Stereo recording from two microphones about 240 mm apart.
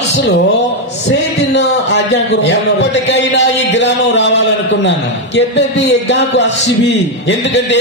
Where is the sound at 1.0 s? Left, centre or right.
Left.